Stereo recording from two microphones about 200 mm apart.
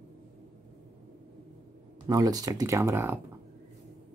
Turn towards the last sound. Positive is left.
turn(degrees=-15)  # may be behind; listen again after turning